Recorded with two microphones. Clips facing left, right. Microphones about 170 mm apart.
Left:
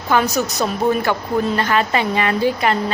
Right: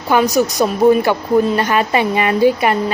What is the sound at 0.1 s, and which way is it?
A woman's voice, 15° right (ahead or behind).